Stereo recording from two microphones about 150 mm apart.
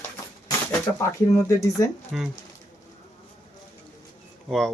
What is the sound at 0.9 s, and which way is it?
Speech, 20° left (ahead or behind).